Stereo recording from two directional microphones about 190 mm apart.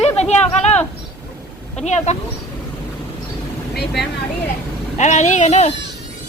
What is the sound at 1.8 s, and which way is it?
Speech, 35° left (ahead or behind).